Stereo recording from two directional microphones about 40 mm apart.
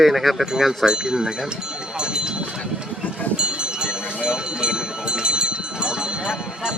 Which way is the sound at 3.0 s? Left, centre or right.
Left.